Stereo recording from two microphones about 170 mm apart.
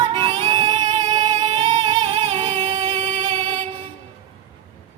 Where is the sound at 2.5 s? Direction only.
25° right (ahead or behind).